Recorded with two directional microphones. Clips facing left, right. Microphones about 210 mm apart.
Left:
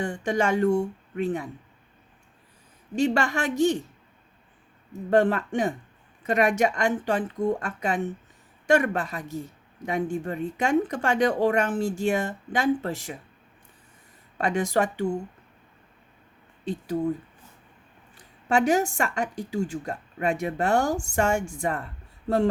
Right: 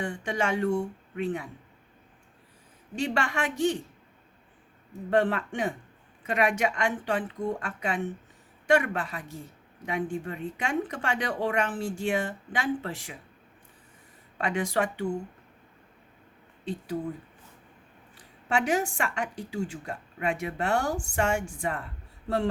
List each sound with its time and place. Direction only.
0.0 s a woman's voice: 45° left (ahead or behind)
3.0 s a woman's voice: 40° left (ahead or behind)
5.1 s a woman's voice: 45° left (ahead or behind)
14.3 s a woman's voice: 45° left (ahead or behind)
16.6 s a woman's voice: 45° left (ahead or behind)
18.4 s a woman's voice: 45° left (ahead or behind)